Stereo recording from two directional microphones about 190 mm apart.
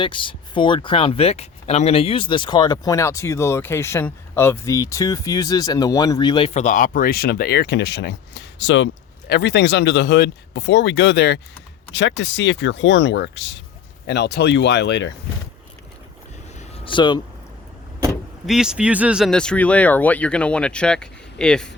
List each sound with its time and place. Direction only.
0.0 s speech: 25° left (ahead or behind)
6.5 s speech: 40° left (ahead or behind); by 15.1 s 65° left (ahead or behind)
16.6 s a sound: 25° left (ahead or behind)
18.4 s speech: 5° right (ahead or behind)